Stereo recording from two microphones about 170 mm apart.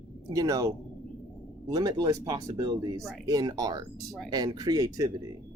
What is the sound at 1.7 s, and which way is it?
Speech, 25° right (ahead or behind).